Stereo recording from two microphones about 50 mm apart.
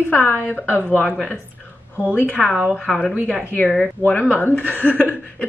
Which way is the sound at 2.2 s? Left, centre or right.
Left.